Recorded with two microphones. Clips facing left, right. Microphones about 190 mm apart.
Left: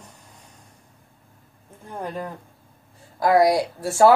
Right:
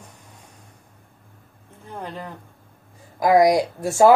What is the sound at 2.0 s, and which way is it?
Speech, 10° left (ahead or behind).